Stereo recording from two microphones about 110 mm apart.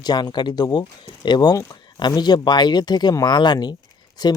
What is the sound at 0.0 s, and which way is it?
Speech, 40° left (ahead or behind).